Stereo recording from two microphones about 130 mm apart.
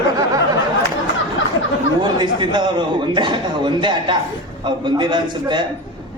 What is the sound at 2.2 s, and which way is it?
A man's voice, 35° right (ahead or behind).